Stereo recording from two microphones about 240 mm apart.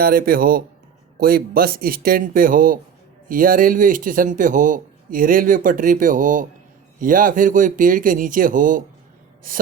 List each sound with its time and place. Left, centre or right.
0.0 s speech: right